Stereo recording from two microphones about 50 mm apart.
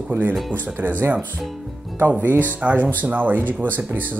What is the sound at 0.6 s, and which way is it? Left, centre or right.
Speech, right.